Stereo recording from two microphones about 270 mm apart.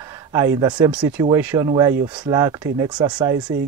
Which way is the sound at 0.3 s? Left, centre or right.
Centre.